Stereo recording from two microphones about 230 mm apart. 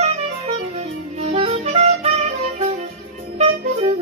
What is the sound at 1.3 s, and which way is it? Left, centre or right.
Music, right.